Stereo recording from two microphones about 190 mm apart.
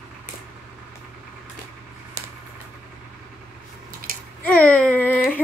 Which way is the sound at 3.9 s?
50° right (ahead or behind).